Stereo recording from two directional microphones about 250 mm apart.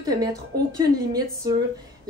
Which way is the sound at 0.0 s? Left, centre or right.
Centre.